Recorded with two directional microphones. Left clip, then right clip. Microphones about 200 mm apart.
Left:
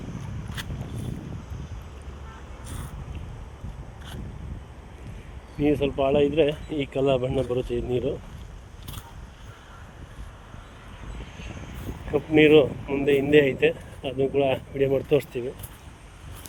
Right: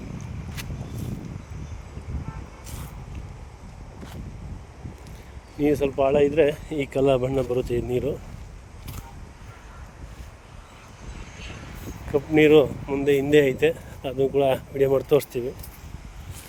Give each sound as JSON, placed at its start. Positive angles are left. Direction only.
{"t": 0.5, "sound": "vehicle", "side_deg": 10}
{"t": 5.5, "sound": "speech", "side_deg": -30}
{"t": 12.1, "sound": "speech", "side_deg": -20}